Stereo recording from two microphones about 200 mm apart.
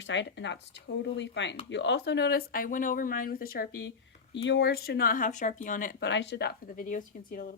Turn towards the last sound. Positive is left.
turn(degrees=45)  # may be behind; listen again after turning